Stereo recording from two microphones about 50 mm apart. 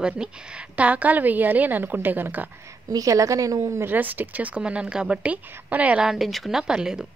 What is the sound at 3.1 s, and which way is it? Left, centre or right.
Speech, right.